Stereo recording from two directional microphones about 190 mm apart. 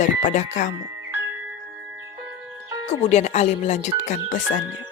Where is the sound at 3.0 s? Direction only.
35° left (ahead or behind).